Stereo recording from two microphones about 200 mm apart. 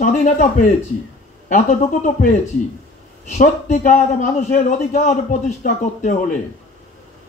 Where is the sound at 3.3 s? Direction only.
35° left (ahead or behind).